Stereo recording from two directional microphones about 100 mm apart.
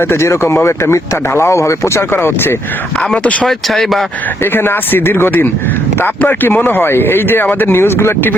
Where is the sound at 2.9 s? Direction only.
10° left (ahead or behind).